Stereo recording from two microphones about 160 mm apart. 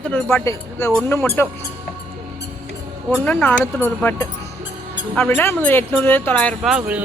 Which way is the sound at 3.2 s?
10° left (ahead or behind).